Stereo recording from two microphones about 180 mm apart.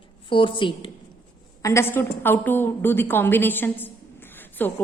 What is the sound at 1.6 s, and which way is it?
A woman's voice, 15° left (ahead or behind).